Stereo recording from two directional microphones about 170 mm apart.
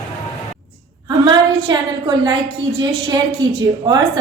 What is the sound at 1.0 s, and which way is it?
A woman's voice, 25° right (ahead or behind).